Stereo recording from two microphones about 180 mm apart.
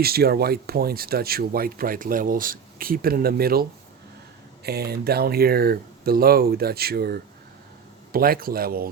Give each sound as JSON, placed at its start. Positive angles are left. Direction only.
{"t": 0.0, "sound": "speech", "side_deg": -60}